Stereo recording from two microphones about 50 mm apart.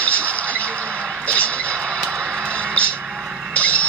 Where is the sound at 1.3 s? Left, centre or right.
Left.